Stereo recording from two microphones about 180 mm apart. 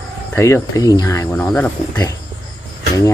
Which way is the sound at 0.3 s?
15° left (ahead or behind).